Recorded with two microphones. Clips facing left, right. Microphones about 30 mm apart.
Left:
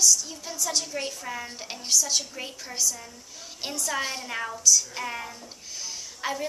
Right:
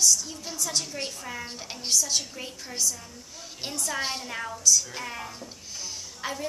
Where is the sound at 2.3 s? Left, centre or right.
Centre.